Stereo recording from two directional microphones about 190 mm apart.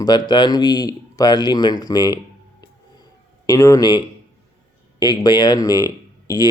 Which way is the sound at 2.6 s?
20° left (ahead or behind).